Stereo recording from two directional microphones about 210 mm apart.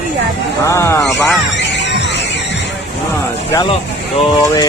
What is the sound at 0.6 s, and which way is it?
Speech, 15° left (ahead or behind).